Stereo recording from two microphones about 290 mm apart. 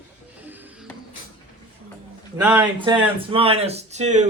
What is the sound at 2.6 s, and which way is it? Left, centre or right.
Speech, centre.